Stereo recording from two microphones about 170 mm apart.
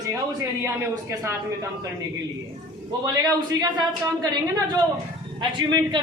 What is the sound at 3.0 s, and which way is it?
A woman's voice, 20° right (ahead or behind).